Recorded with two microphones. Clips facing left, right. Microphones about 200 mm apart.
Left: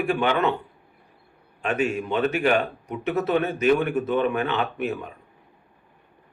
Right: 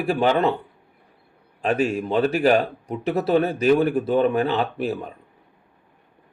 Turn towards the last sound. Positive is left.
turn(degrees=-35)  # may be behind; listen again after turning